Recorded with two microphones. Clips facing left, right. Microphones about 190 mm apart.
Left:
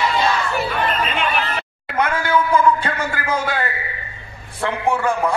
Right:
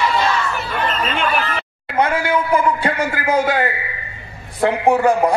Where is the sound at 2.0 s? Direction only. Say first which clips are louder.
Right 3 dB; 25° right (ahead or behind).